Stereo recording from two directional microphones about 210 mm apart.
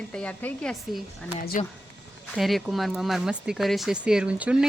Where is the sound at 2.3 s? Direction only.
Centre (ahead or behind).